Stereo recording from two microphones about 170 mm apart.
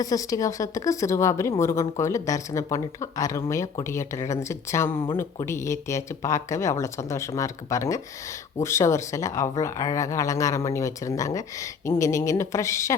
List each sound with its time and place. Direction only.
0.0 s a woman's voice: 20° left (ahead or behind)